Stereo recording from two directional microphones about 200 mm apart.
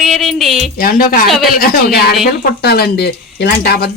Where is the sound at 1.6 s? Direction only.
50° left (ahead or behind).